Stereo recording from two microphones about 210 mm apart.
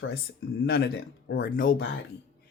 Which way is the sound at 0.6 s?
50° left (ahead or behind).